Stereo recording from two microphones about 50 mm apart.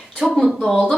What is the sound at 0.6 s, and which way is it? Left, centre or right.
Speech, centre.